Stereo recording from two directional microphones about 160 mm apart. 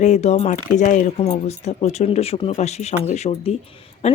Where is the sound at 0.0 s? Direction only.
45° left (ahead or behind).